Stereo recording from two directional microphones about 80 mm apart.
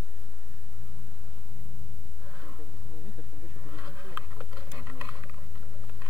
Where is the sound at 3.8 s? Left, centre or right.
Right.